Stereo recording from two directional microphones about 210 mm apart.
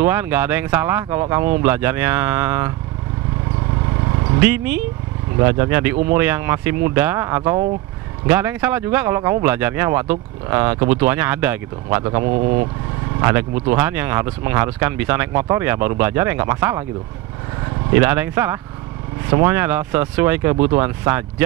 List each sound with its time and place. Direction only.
0.0 s speech: 10° right (ahead or behind)
4.4 s speech: 10° right (ahead or behind)
12.3 s speech: 35° right (ahead or behind)
13.2 s speech: 10° right (ahead or behind)
17.9 s speech: 10° right (ahead or behind)